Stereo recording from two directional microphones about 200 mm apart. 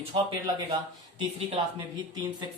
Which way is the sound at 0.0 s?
25° right (ahead or behind).